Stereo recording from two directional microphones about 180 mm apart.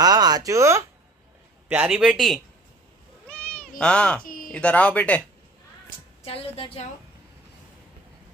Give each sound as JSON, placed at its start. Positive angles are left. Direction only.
{"t": 0.0, "sound": "a man's voice", "side_deg": -20}
{"t": 3.3, "sound": "cat", "side_deg": 10}
{"t": 4.2, "sound": "a sound", "side_deg": 50}
{"t": 4.5, "sound": "speech", "side_deg": 5}
{"t": 6.2, "sound": "a woman's voice", "side_deg": 30}